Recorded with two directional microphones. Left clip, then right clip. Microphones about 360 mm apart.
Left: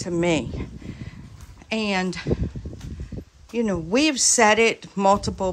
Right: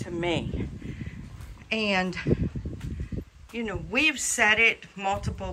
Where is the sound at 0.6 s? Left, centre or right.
Centre.